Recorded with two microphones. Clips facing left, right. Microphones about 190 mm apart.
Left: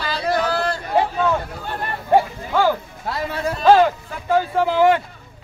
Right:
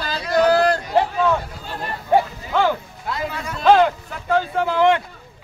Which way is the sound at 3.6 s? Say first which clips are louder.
Left 1 dB; 5° left (ahead or behind).